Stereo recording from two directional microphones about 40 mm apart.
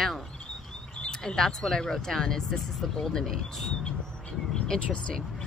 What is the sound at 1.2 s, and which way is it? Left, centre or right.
Speech, centre.